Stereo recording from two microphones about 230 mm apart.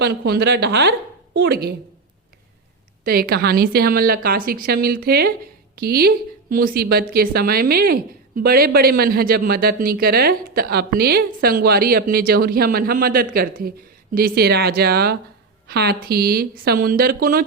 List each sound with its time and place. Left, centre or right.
0.0 s a woman's voice: right
3.0 s a woman's voice: right